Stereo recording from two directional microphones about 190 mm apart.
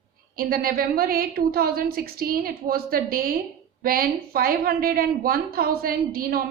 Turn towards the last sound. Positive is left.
turn(degrees=-50)  # may be behind; listen again after turning